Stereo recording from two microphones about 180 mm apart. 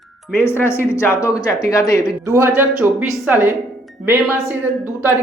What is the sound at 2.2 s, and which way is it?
Speech, 15° right (ahead or behind).